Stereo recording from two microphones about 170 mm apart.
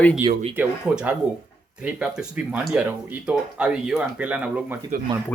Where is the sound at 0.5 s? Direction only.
10° right (ahead or behind).